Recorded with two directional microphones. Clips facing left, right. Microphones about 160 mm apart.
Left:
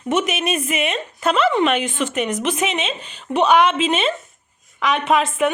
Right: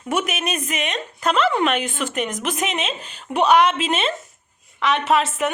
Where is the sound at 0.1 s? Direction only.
Centre (ahead or behind).